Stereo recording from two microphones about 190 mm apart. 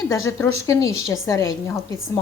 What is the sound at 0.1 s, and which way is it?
Speech, 15° left (ahead or behind).